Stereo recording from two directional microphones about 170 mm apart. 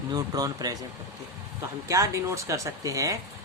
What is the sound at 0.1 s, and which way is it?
Speech, 20° right (ahead or behind).